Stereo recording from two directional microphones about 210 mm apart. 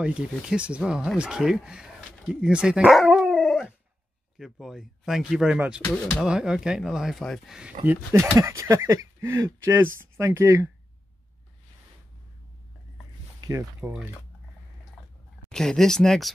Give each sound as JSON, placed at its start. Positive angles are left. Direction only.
{"t": 0.0, "sound": "speech", "side_deg": -5}
{"t": 13.4, "sound": "a sound", "side_deg": -15}
{"t": 13.7, "sound": "speech", "side_deg": -5}
{"t": 15.5, "sound": "speech", "side_deg": 5}